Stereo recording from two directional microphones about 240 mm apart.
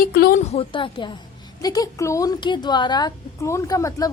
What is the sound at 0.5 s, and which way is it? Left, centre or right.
A woman's voice, left.